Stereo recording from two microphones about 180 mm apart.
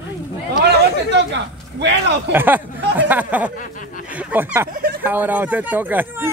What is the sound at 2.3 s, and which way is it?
Speech, 10° right (ahead or behind).